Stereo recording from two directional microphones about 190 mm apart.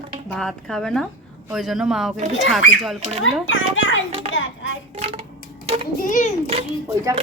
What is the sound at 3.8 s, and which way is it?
Speech, 90° left.